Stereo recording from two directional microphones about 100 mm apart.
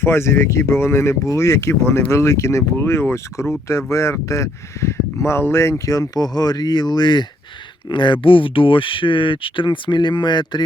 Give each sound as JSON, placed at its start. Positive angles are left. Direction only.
{"t": 0.0, "sound": "speech", "side_deg": 25}